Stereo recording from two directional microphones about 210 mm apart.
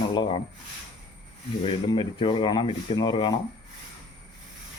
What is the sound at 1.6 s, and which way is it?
Speech, 25° left (ahead or behind).